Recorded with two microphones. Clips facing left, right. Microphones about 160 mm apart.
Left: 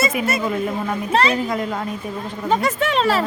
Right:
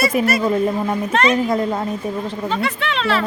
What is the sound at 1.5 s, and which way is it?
Speech, 30° right (ahead or behind).